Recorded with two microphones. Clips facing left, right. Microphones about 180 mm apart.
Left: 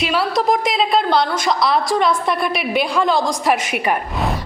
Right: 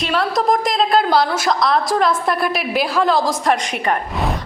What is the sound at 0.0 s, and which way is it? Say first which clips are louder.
A woman's voice: even; 5° left (ahead or behind).